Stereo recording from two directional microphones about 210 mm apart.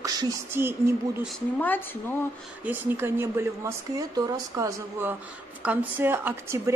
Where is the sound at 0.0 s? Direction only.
15° right (ahead or behind).